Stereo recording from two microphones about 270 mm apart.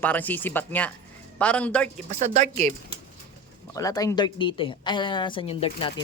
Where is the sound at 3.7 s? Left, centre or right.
Centre.